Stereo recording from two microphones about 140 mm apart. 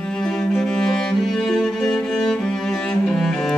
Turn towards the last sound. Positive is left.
turn(degrees=5)  # may be behind; listen again after turning